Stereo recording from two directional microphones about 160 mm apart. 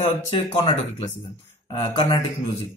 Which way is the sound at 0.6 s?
40° left (ahead or behind).